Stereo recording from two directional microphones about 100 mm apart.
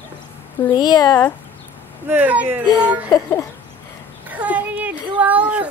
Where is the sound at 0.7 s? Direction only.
45° left (ahead or behind).